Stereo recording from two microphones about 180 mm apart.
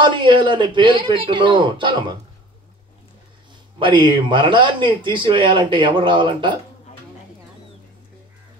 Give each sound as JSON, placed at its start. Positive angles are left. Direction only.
{"t": 0.0, "sound": "speech", "side_deg": -25}
{"t": 3.8, "sound": "speech", "side_deg": -25}